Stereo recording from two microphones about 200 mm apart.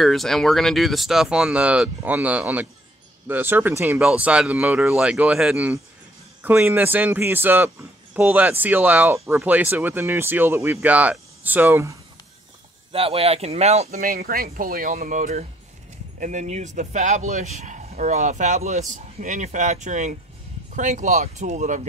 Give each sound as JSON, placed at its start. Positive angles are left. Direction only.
{"t": 0.0, "sound": "speech", "side_deg": 0}
{"t": 12.9, "sound": "speech", "side_deg": -30}
{"t": 13.9, "sound": "speech", "side_deg": -50}